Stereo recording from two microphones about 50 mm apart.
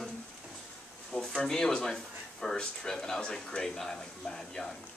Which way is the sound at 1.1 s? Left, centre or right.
Centre.